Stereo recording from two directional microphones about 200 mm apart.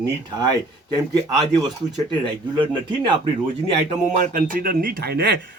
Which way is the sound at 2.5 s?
25° right (ahead or behind).